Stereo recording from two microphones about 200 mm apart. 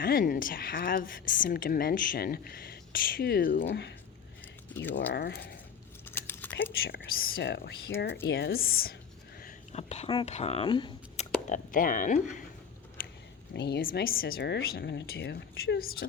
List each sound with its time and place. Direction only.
0.0 s a woman's voice: 45° left (ahead or behind)
4.7 s speech: 10° left (ahead or behind)
4.9 s a woman's voice: 55° left (ahead or behind)
6.1 s a sound: 10° left (ahead or behind)
6.8 s a woman's voice: 50° left (ahead or behind)
9.7 s speech: 35° left (ahead or behind)
11.4 s speech: 40° left (ahead or behind)
13.5 s a woman's voice: 55° left (ahead or behind)